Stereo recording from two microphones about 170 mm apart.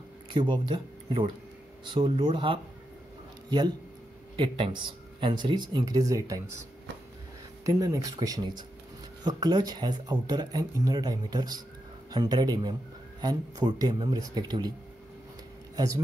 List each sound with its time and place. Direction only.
0.3 s speech: 30° right (ahead or behind)
7.6 s speech: 20° right (ahead or behind)